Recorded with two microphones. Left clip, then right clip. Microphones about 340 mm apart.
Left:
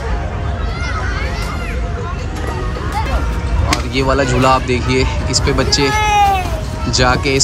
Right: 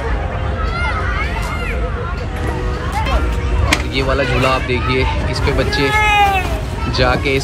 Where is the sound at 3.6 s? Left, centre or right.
Centre.